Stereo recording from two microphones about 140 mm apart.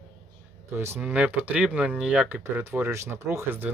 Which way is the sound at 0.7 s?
15° right (ahead or behind).